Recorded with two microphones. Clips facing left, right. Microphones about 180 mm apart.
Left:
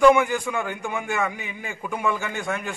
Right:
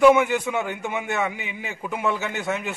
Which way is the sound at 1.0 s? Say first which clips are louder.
Even; 5° right (ahead or behind).